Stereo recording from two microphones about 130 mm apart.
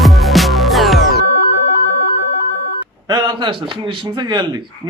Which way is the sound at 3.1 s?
35° right (ahead or behind).